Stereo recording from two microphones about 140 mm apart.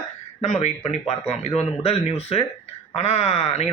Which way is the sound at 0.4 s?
55° left (ahead or behind).